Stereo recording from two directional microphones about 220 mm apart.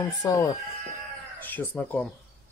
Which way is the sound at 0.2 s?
15° left (ahead or behind).